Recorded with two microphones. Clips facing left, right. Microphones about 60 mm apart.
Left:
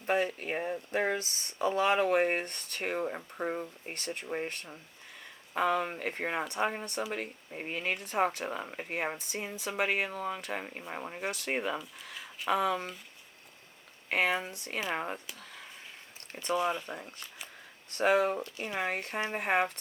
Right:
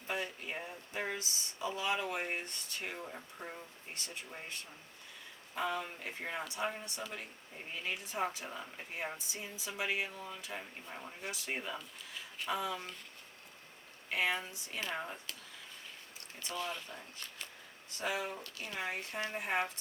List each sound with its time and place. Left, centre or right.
0.1 s speech: left
14.1 s speech: left
16.5 s speech: left
17.2 s speech: centre
17.9 s speech: left